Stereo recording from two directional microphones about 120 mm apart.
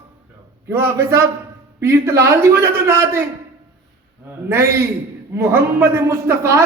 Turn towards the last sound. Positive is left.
turn(degrees=-20)  # may be behind; listen again after turning